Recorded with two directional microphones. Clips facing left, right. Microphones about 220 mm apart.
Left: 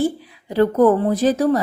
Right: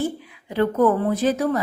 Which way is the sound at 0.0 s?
35° left (ahead or behind).